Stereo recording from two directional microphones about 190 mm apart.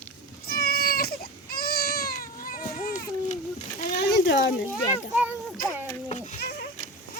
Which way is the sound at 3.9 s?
60° left (ahead or behind).